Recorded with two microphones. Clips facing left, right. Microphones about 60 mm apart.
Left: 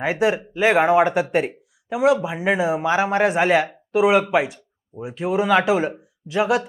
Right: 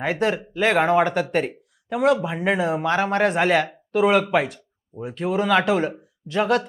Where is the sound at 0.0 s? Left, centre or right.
Centre.